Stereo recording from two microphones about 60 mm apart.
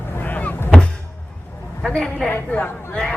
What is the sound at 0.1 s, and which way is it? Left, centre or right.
Vehicle, left.